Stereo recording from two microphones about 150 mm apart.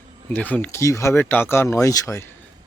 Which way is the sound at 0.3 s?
10° left (ahead or behind).